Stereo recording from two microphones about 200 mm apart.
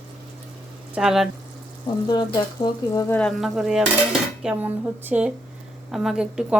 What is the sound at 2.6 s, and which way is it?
Speech, 15° left (ahead or behind).